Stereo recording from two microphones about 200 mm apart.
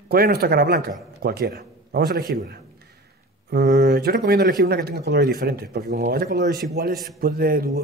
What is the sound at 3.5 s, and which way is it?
Speech, 50° right (ahead or behind).